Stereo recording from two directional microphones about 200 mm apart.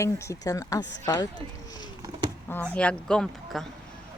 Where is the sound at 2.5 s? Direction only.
5° left (ahead or behind).